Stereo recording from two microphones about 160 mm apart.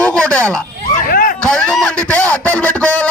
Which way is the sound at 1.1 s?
65° left (ahead or behind).